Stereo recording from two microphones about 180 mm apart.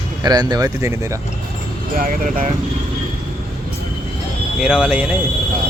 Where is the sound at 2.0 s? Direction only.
50° right (ahead or behind).